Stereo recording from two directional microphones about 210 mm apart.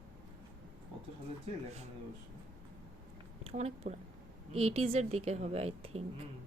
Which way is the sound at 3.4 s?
30° right (ahead or behind).